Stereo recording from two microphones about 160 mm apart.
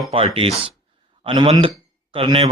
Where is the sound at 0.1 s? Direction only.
35° right (ahead or behind).